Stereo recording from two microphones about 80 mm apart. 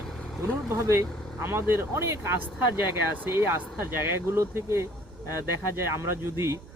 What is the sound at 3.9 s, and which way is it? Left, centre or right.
Speech, right.